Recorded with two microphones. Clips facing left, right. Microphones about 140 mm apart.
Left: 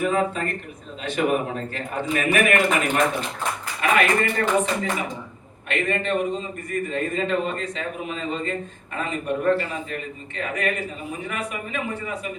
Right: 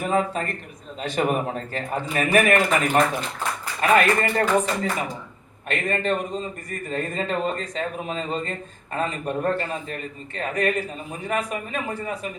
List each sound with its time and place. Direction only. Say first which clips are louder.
0.0 s speech: left 1 dB; 35° right (ahead or behind)